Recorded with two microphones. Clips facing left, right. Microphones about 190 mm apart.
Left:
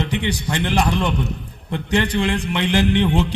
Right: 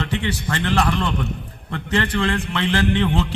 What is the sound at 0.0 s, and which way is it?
A man's voice, 15° left (ahead or behind).